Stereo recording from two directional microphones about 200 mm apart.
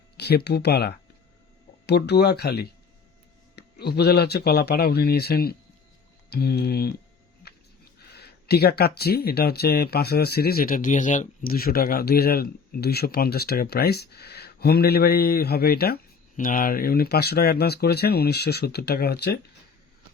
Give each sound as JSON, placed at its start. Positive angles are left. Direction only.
{"t": 0.2, "sound": "speech", "side_deg": 55}
{"t": 7.4, "sound": "a sound", "side_deg": 50}
{"t": 8.1, "sound": "speech", "side_deg": 55}